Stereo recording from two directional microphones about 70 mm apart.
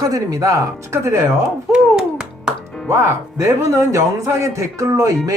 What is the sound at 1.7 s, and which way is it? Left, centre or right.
Music, centre.